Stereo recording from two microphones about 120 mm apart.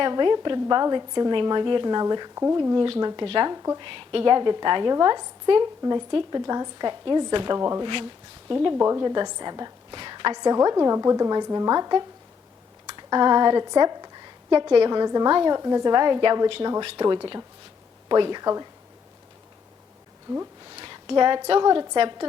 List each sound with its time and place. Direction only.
0.0 s a woman's voice: 40° right (ahead or behind)
2.7 s speech: 50° right (ahead or behind)
3.0 s a woman's voice: 35° right (ahead or behind)
3.8 s a woman's voice: 45° right (ahead or behind)
7.6 s speech: 25° right (ahead or behind)
7.9 s a woman's voice: 45° right (ahead or behind)
8.7 s a woman's voice: 25° right (ahead or behind)
20.7 s a sound: 40° right (ahead or behind)
21.6 s a woman's voice: 35° right (ahead or behind)